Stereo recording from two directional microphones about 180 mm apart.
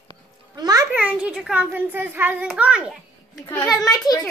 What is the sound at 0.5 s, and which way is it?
Music, 20° right (ahead or behind).